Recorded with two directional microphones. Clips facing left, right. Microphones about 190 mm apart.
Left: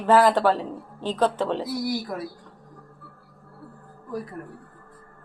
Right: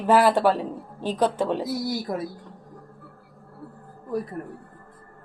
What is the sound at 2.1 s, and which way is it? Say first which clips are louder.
Speech: right 3 dB; 25° right (ahead or behind).